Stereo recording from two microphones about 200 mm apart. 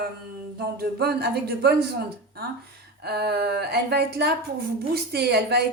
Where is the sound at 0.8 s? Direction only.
50° right (ahead or behind).